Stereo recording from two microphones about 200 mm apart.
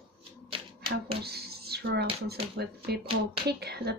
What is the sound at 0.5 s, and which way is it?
Hands, 25° right (ahead or behind).